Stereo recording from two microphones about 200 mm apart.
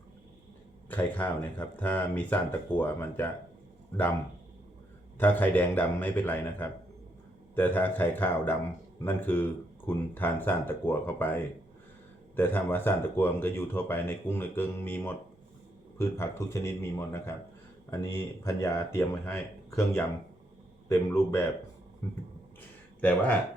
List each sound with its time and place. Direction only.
0.9 s speech: 10° left (ahead or behind)
5.1 s speech: 10° left (ahead or behind)
12.4 s speech: 10° left (ahead or behind)